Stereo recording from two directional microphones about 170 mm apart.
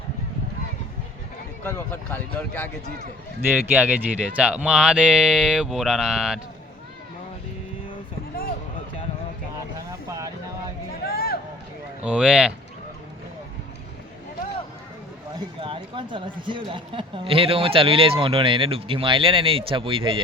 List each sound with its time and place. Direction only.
1.6 s speech: 10° left (ahead or behind)
3.5 s speech: 10° right (ahead or behind)
10.1 s a sound: 20° right (ahead or behind)
11.1 s a sound: 60° left (ahead or behind)
12.0 s speech: 5° right (ahead or behind)
15.4 s speech: 30° right (ahead or behind)